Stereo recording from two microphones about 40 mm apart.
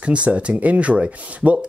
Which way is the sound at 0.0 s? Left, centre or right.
Right.